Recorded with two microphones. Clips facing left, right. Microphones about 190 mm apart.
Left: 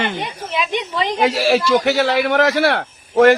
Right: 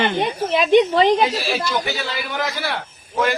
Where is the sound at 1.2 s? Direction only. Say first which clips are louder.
Left 4 dB; 85° left.